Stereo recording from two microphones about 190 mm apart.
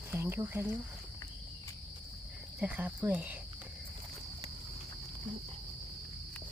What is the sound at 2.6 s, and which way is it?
Speech, 10° right (ahead or behind).